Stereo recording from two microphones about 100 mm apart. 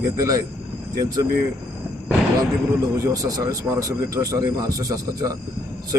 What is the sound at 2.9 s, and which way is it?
A man's voice, 35° right (ahead or behind).